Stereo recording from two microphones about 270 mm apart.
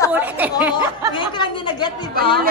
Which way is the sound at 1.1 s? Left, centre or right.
Centre.